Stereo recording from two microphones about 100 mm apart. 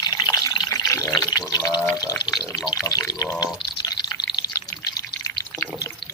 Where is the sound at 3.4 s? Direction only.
40° left (ahead or behind).